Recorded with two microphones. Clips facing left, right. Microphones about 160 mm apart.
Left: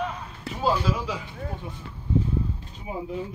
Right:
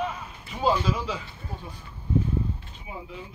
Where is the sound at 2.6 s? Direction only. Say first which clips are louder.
Left 6 dB; 40° left (ahead or behind).